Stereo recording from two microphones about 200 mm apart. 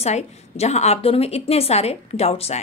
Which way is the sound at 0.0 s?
35° left (ahead or behind).